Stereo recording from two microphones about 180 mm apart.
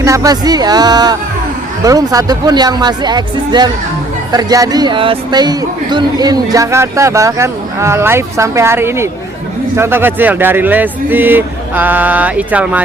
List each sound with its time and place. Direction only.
0.0 s speech: 15° right (ahead or behind)